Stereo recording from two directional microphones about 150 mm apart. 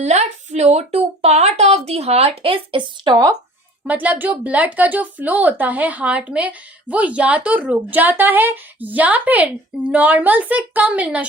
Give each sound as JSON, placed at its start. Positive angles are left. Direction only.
{"t": 0.0, "sound": "a woman's voice", "side_deg": -50}
{"t": 3.8, "sound": "speech", "side_deg": -10}